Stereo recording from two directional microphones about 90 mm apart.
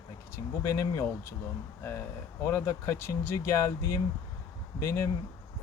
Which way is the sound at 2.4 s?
30° left (ahead or behind).